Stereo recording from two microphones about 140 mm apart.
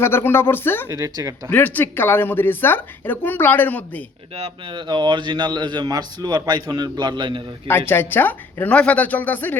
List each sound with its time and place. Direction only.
0.0 s speech: 15° left (ahead or behind)
0.9 s a man's voice: 25° right (ahead or behind)
1.5 s speech: 10° left (ahead or behind)
4.4 s a man's voice: 40° right (ahead or behind)
7.7 s speech: 15° left (ahead or behind)